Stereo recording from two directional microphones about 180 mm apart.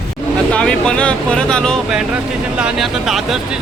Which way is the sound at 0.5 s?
5° left (ahead or behind).